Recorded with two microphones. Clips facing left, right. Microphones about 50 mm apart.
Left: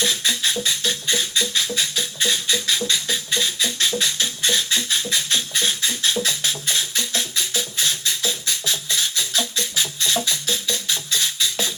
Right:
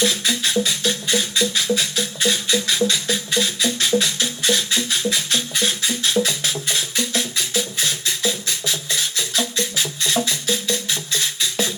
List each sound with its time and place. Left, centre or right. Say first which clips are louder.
0.0 s music: right 2 dB; right